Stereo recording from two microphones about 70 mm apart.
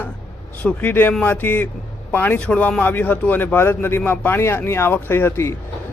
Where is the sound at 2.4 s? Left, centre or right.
Centre.